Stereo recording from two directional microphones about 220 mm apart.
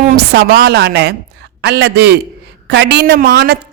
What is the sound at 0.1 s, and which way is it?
A woman's voice, 45° right (ahead or behind).